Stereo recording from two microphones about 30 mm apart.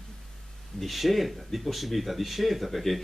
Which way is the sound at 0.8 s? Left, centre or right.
Centre.